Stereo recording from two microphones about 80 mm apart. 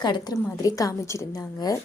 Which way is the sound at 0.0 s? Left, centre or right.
Left.